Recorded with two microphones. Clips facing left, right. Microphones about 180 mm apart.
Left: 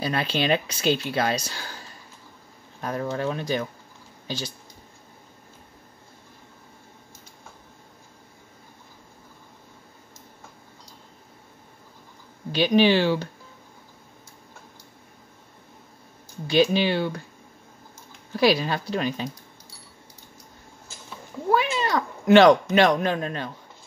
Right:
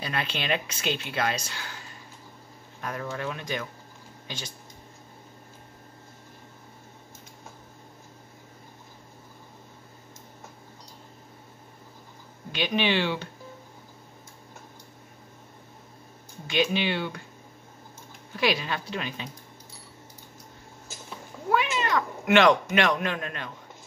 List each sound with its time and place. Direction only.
0.0 s speech: 35° left (ahead or behind)
2.8 s speech: 35° left (ahead or behind)
12.5 s speech: 35° left (ahead or behind)
16.4 s speech: 35° left (ahead or behind)
18.3 s speech: 35° left (ahead or behind)
21.5 s speech: 35° left (ahead or behind)